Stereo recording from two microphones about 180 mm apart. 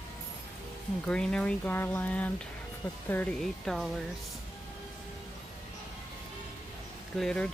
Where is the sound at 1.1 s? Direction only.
5° left (ahead or behind).